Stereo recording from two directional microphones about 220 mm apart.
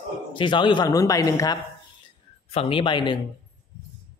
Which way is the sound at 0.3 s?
20° left (ahead or behind).